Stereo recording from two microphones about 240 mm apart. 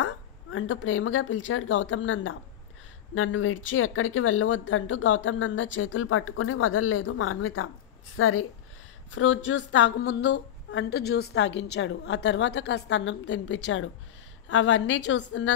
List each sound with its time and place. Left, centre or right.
0.0 s a woman's voice: left